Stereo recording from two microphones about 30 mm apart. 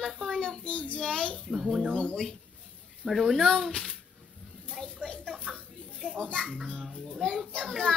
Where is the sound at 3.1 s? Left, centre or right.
Centre.